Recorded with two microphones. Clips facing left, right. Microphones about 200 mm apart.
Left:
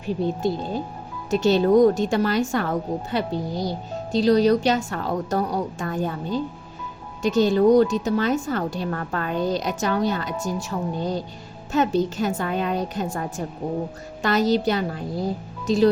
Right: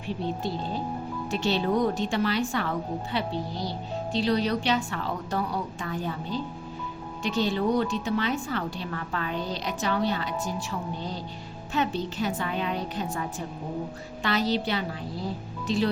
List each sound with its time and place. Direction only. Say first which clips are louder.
1.3 s a woman's voice: left 9 dB; 45° left (ahead or behind)